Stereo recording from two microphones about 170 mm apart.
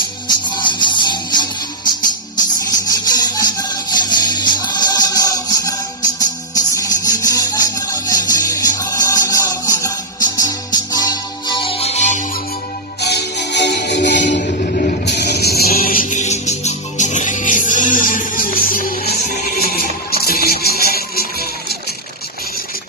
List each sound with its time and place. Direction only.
0.4 s music: 25° left (ahead or behind)
2.9 s music: 25° left (ahead or behind); by 12.2 s 45° left (ahead or behind)
13.0 s music: 80° left